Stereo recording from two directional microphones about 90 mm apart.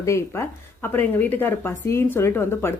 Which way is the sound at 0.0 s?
30° left (ahead or behind).